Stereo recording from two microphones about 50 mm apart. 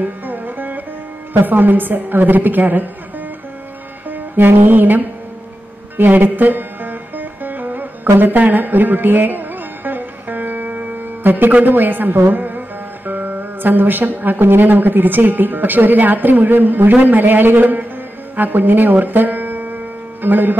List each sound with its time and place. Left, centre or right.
0.0 s music: right
1.4 s speech: right
4.1 s music: right
11.6 s speech: right
18.3 s music: right